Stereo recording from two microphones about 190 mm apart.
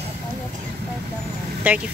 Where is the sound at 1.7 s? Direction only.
10° right (ahead or behind).